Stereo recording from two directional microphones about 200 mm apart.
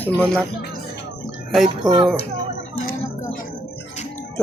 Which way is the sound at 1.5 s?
Centre (ahead or behind).